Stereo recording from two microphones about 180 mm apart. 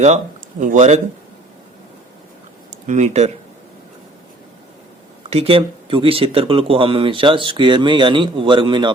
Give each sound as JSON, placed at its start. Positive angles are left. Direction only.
{"t": 0.6, "sound": "speech", "side_deg": -40}
{"t": 2.6, "sound": "speech", "side_deg": -40}
{"t": 5.3, "sound": "speech", "side_deg": -35}